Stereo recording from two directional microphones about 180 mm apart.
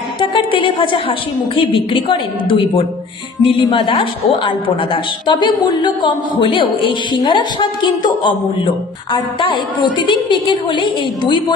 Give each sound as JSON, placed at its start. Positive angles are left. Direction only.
{"t": 0.2, "sound": "a woman's voice", "side_deg": 30}